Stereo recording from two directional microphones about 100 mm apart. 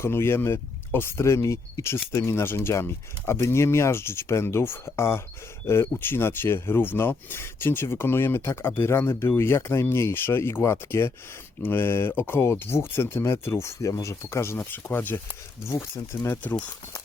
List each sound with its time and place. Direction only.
0.0 s speech: 25° left (ahead or behind)